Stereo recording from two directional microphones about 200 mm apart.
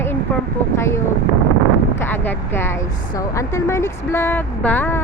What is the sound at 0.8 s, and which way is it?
Speech, 15° left (ahead or behind).